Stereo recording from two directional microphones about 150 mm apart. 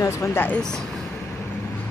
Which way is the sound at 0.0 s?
20° left (ahead or behind).